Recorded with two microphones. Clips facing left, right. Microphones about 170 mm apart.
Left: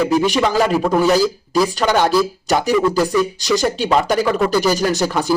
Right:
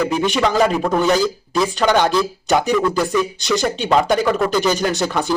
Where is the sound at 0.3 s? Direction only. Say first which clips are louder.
Even; centre (ahead or behind).